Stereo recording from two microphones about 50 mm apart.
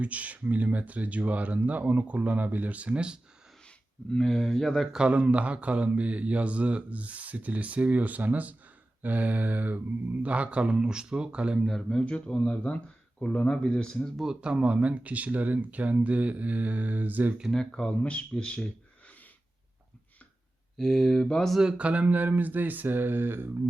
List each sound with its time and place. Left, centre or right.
0.0 s speech: right
4.1 s speech: centre
5.0 s speech: right
11.8 s speech: centre
14.3 s speech: right
17.5 s speech: centre
20.7 s speech: centre
21.6 s speech: centre
21.8 s speech: right